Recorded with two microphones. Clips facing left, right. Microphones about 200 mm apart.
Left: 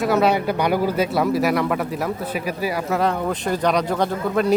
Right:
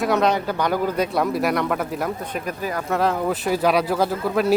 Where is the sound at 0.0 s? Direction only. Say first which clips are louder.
Left 2 dB; 5° left (ahead or behind).